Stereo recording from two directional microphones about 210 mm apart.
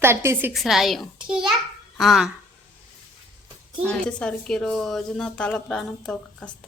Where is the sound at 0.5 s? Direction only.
Centre (ahead or behind).